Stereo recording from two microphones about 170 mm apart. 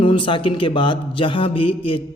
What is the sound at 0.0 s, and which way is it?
A man's voice, 30° left (ahead or behind).